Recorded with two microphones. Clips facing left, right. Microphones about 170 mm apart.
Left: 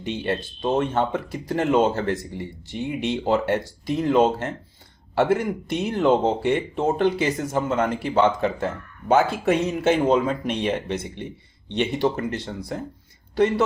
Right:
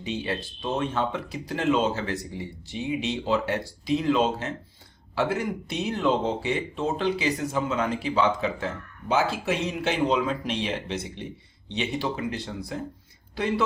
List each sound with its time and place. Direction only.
0.0 s speech: 55° left (ahead or behind)